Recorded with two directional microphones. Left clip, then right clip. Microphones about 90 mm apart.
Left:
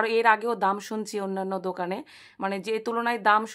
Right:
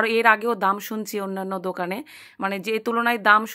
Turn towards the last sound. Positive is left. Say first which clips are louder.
# right 4 dB
turn(degrees=-30)  # may be behind; listen again after turning